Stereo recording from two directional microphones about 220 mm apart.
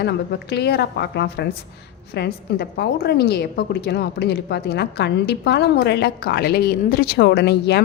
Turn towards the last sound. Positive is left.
turn(degrees=50)  # may be behind; listen again after turning